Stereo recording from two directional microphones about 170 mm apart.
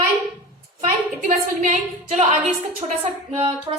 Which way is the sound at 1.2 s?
50° right (ahead or behind).